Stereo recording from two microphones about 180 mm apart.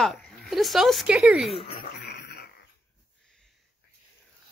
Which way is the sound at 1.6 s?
60° left (ahead or behind).